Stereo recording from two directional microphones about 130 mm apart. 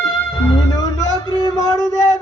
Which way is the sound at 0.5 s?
30° left (ahead or behind).